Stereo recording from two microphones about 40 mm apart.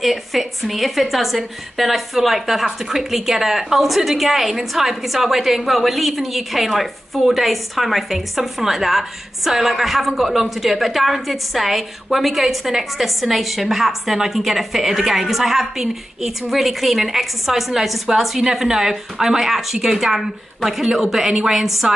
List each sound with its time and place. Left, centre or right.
0.0 s a woman's voice: centre